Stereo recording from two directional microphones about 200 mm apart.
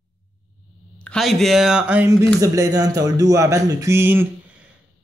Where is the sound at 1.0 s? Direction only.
Centre (ahead or behind).